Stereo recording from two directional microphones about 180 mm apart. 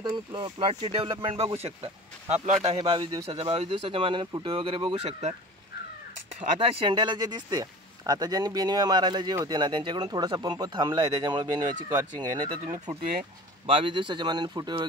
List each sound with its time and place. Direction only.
0.0 s speech: 25° right (ahead or behind)
6.4 s speech: 30° right (ahead or behind)
12.6 s speech: 40° right (ahead or behind)
13.7 s speech: 30° right (ahead or behind)